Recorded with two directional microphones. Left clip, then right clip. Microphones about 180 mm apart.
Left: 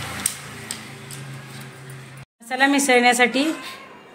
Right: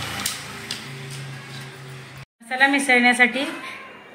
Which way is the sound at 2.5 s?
60° left (ahead or behind).